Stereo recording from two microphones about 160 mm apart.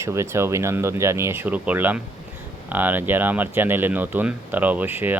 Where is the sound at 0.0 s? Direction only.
15° right (ahead or behind).